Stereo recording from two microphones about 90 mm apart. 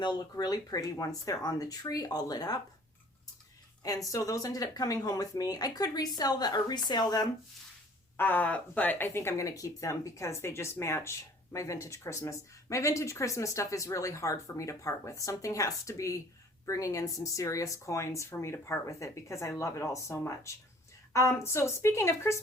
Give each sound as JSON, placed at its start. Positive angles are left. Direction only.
{"t": 0.0, "sound": "speech", "side_deg": 50}
{"t": 3.8, "sound": "speech", "side_deg": 40}
{"t": 8.1, "sound": "speech", "side_deg": 20}